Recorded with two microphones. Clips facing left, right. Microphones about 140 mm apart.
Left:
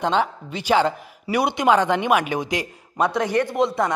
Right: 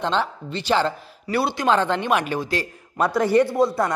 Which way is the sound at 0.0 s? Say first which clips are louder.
Left 2 dB; 10° left (ahead or behind).